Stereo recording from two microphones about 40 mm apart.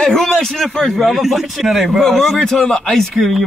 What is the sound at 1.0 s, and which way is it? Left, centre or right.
A man's voice, centre.